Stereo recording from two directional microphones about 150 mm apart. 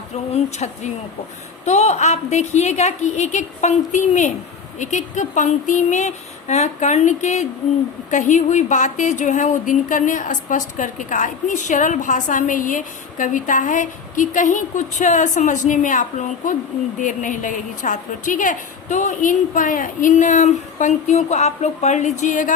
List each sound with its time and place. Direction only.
0.3 s a woman's voice: 50° left (ahead or behind)